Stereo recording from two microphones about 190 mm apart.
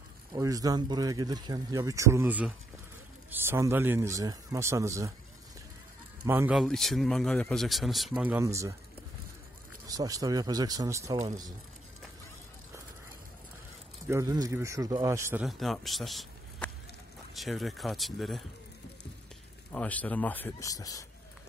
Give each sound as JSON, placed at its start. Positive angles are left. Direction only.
{"t": 0.3, "sound": "speech", "side_deg": -20}
{"t": 6.2, "sound": "speech", "side_deg": -10}
{"t": 9.8, "sound": "speech", "side_deg": -20}
{"t": 14.0, "sound": "speech", "side_deg": -15}
{"t": 15.4, "sound": "a man's voice", "side_deg": 0}
{"t": 19.7, "sound": "speech", "side_deg": 10}